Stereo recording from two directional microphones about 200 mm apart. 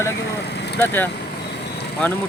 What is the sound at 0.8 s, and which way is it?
Speech, 10° left (ahead or behind).